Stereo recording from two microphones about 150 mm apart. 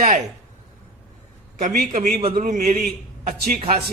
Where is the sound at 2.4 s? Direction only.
55° right (ahead or behind).